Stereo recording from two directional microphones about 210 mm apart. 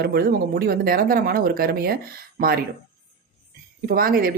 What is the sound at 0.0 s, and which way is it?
Speech, 50° right (ahead or behind).